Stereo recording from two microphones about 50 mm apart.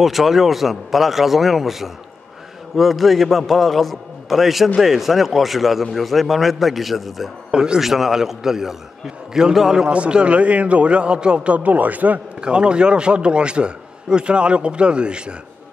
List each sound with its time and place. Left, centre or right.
0.0 s a man's voice: centre
7.5 s a man's voice: centre
9.8 s a man's voice: right
12.4 s a man's voice: centre